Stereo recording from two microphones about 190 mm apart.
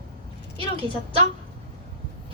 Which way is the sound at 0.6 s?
30° right (ahead or behind).